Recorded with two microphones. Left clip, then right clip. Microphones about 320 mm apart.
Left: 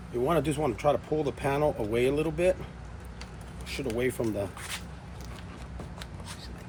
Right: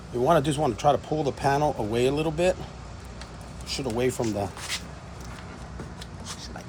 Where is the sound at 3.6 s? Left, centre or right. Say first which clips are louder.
Right 3 dB; centre.